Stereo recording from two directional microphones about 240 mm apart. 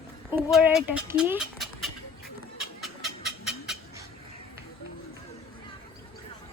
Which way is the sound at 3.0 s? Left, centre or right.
Centre.